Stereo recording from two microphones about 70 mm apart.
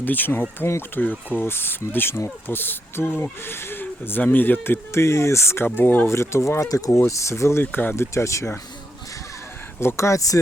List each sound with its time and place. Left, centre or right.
0.0 s speech: left
6.1 s speech: left
7.6 s speech: left
7.9 s speech: left
9.8 s speech: left